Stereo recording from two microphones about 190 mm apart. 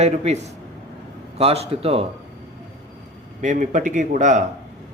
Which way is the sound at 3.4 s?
40° right (ahead or behind).